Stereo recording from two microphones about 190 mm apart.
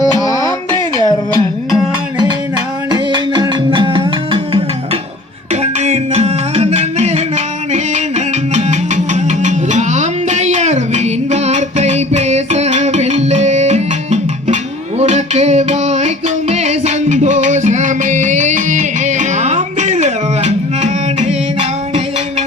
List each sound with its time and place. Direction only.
0.0 s music: 20° left (ahead or behind)
0.9 s a sound: 25° right (ahead or behind)
1.7 s music: 25° right (ahead or behind)
5.8 s music: 35° right (ahead or behind)
9.4 s music: 40° right (ahead or behind)